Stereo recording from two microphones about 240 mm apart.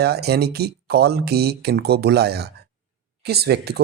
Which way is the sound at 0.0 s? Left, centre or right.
Right.